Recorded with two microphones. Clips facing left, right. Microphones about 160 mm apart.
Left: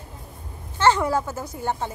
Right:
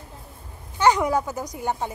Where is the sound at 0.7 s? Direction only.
15° right (ahead or behind).